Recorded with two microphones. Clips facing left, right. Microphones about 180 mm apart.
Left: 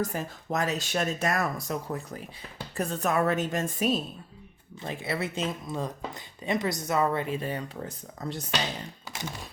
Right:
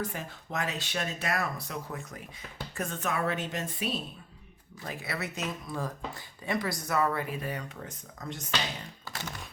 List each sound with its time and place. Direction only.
0.0 s a woman's voice: 40° left (ahead or behind)
4.8 s speech: 25° left (ahead or behind)